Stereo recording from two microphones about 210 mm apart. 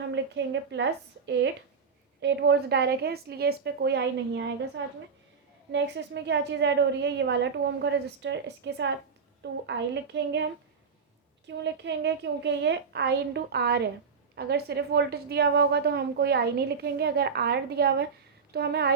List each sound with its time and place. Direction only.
0.1 s a woman's voice: 55° right (ahead or behind)